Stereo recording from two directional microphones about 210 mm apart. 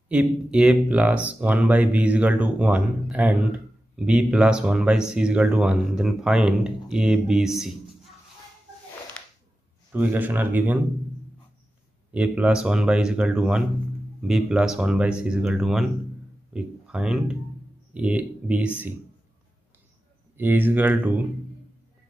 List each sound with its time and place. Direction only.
0.1 s speech: 5° right (ahead or behind)
9.9 s speech: 10° right (ahead or behind)
12.1 s speech: 5° right (ahead or behind)
20.3 s speech: 10° right (ahead or behind)